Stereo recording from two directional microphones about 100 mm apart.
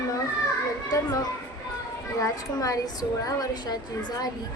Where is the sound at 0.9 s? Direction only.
40° left (ahead or behind).